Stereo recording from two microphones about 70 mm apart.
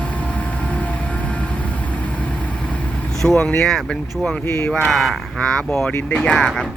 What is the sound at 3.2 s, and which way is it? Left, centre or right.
Speech, centre.